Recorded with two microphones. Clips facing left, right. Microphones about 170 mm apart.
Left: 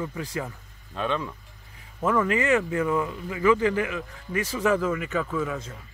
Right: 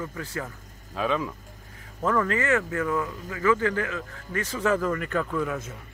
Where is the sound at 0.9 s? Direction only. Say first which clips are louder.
Right 1 dB; 5° right (ahead or behind).